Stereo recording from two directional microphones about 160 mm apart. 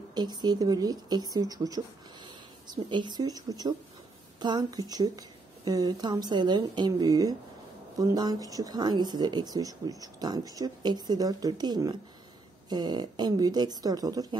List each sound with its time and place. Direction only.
0.1 s speech: 25° right (ahead or behind)